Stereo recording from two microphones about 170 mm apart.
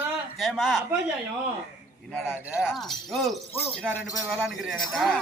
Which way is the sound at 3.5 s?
10° left (ahead or behind).